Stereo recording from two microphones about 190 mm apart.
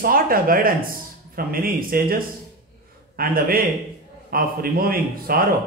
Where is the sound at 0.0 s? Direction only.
50° right (ahead or behind).